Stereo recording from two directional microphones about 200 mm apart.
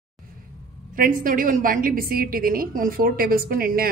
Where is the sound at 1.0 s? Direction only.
45° right (ahead or behind).